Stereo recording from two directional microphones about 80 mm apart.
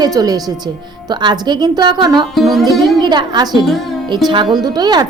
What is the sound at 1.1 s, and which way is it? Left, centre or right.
Speech, right.